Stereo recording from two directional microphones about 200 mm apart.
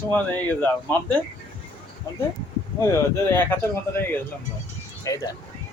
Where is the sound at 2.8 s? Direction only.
15° left (ahead or behind).